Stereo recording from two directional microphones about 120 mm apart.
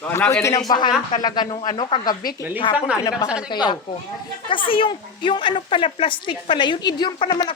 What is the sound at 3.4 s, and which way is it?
A woman's voice, 40° left (ahead or behind).